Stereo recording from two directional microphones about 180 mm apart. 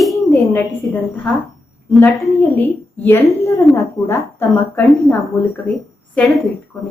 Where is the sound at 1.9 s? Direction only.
10° left (ahead or behind).